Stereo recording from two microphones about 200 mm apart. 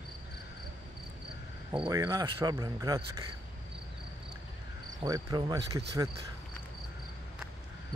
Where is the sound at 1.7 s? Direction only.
20° right (ahead or behind).